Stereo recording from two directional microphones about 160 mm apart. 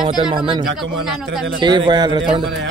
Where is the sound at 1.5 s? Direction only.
30° right (ahead or behind).